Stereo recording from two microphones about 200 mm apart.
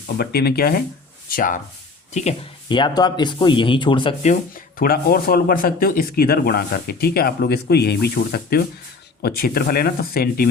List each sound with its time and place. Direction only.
0.2 s speech: 50° left (ahead or behind)
2.6 s speech: 25° left (ahead or behind); by 10.5 s 50° left (ahead or behind)